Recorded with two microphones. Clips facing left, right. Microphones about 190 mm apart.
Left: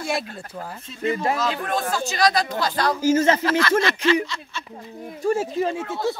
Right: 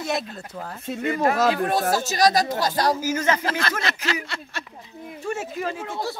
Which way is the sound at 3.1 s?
25° left (ahead or behind).